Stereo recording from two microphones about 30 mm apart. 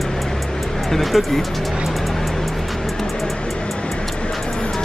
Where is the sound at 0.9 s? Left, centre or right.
Centre.